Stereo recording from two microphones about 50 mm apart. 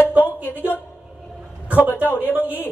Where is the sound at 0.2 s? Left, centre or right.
Left.